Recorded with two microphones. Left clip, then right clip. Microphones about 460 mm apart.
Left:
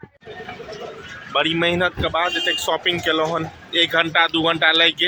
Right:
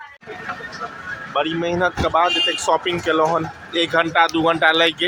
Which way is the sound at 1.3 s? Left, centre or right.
Left.